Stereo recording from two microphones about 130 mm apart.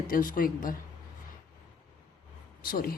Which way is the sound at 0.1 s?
90° left.